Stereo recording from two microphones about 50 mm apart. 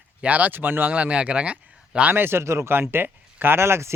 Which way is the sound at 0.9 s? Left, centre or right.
Right.